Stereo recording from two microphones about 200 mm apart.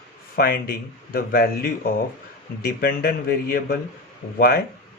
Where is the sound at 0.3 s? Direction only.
50° left (ahead or behind).